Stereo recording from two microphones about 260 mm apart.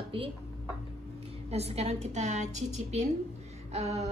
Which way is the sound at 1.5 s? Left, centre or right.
Right.